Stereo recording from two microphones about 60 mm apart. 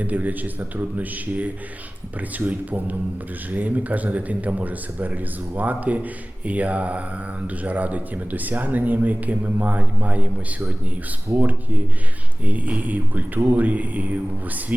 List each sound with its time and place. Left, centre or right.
0.0 s speech: right
2.5 s speech: right
11.3 s speech: right